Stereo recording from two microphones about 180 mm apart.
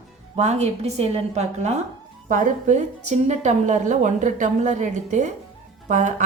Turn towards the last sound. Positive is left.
turn(degrees=-40)  # may be behind; listen again after turning